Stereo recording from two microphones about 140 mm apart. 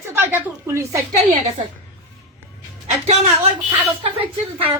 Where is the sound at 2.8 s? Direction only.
55° right (ahead or behind).